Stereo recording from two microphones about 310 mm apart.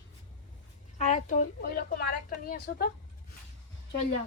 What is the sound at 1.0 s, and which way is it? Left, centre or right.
Speech, left.